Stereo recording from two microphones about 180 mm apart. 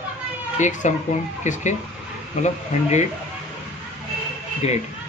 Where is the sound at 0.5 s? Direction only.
45° left (ahead or behind).